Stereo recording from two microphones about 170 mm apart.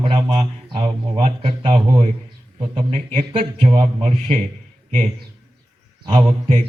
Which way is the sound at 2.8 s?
40° right (ahead or behind).